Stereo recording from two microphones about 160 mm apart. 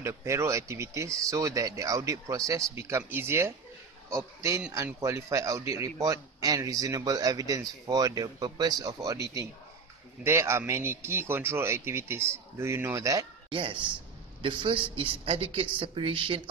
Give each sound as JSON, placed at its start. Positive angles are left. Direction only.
{"t": 0.0, "sound": "a man's voice", "side_deg": -15}
{"t": 13.5, "sound": "speech", "side_deg": -35}